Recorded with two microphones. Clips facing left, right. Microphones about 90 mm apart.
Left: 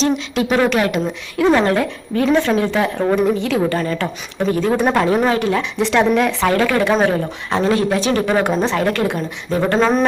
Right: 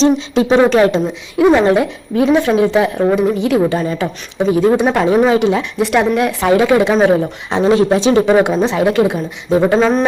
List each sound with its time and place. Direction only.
0.0 s speech: 30° right (ahead or behind)
1.4 s a woman's voice: 15° right (ahead or behind)
8.3 s a woman's voice: 15° right (ahead or behind)
9.7 s speech: centre (ahead or behind)